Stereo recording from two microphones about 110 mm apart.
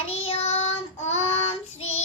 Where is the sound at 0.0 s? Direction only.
65° left (ahead or behind).